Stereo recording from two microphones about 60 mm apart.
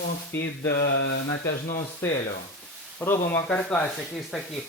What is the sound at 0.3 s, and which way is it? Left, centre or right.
Speech, left.